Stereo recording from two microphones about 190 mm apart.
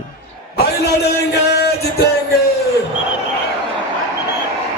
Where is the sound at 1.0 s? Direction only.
60° left (ahead or behind).